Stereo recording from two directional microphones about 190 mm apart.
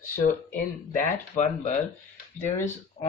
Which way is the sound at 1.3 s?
35° left (ahead or behind).